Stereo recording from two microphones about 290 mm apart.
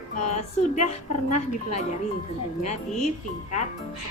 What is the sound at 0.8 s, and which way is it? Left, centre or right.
A woman's voice, left.